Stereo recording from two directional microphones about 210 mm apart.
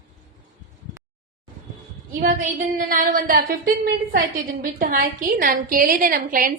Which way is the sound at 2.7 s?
40° right (ahead or behind).